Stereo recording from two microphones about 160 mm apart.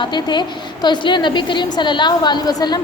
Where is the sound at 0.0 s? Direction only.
30° left (ahead or behind).